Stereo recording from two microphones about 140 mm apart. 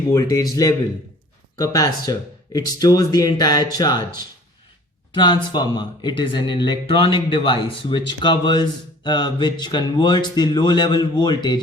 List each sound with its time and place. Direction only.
0.1 s speech: 25° left (ahead or behind)
1.5 s speech: 25° left (ahead or behind)
5.1 s speech: 35° left (ahead or behind)